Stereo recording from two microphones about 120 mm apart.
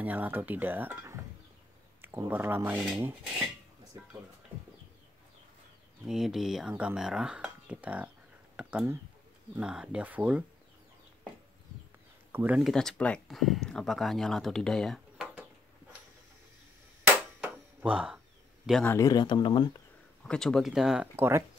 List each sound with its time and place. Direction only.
0.0 s speech: 15° right (ahead or behind)
6.0 s speech: 5° right (ahead or behind)
8.5 s a sound: 10° right (ahead or behind)
9.6 s speech: 10° right (ahead or behind)
12.3 s speech: 15° right (ahead or behind)
12.6 s speech: 5° left (ahead or behind)
17.0 s a sound: 10° right (ahead or behind)
18.9 s speech: 25° left (ahead or behind)
20.2 s speech: 5° left (ahead or behind)
21.2 s speech: 20° right (ahead or behind)